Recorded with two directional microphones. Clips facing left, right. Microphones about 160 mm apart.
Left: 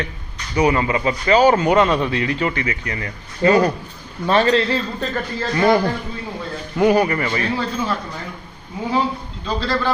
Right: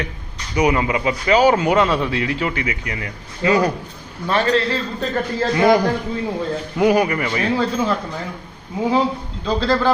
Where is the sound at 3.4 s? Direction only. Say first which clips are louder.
Left 2 dB; 40° left (ahead or behind).